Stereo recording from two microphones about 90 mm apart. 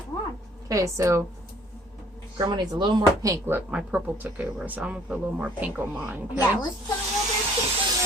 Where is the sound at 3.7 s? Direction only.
15° right (ahead or behind).